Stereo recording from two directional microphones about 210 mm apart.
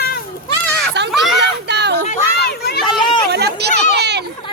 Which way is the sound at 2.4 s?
50° left (ahead or behind).